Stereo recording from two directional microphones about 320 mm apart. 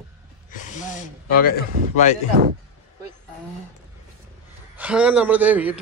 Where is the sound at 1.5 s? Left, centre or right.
Left.